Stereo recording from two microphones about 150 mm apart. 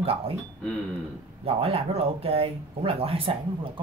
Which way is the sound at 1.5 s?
40° right (ahead or behind).